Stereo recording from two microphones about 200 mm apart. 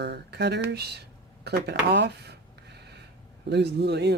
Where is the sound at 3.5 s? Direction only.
55° right (ahead or behind).